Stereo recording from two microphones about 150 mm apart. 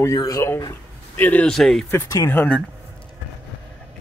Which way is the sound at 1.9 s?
20° left (ahead or behind).